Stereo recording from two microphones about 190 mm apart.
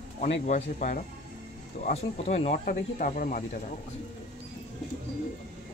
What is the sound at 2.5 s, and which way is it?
Speech, 50° left (ahead or behind).